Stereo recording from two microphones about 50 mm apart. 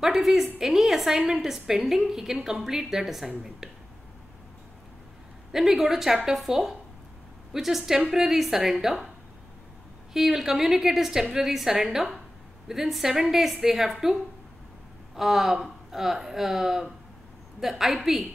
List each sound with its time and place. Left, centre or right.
0.0 s a woman's voice: centre
5.5 s a woman's voice: centre
10.1 s a woman's voice: centre
15.1 s a woman's voice: centre